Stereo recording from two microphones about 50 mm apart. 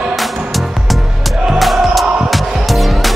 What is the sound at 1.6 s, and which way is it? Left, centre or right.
Music, centre.